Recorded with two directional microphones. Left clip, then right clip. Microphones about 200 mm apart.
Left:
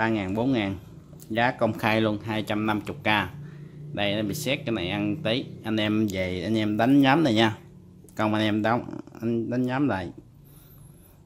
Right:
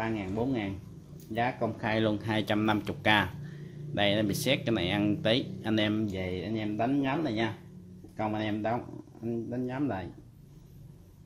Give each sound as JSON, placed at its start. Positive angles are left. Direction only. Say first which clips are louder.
{"t": 0.0, "sound": "speech", "louder": "left 7 dB", "side_deg": 25}
{"t": 2.0, "sound": "speech", "louder": "left 3 dB", "side_deg": 5}
{"t": 5.9, "sound": "speech", "louder": "left 6 dB", "side_deg": 25}